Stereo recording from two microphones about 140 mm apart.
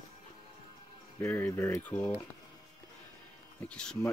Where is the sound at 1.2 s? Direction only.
15° left (ahead or behind).